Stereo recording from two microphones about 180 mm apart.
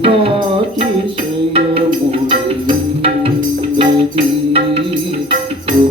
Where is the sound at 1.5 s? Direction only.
30° right (ahead or behind).